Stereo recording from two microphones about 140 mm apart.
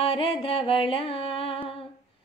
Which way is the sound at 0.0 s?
40° left (ahead or behind).